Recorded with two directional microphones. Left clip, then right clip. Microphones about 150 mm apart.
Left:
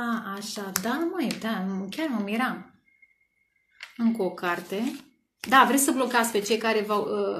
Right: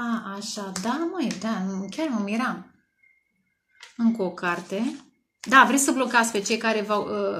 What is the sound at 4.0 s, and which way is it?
Speech, 40° right (ahead or behind).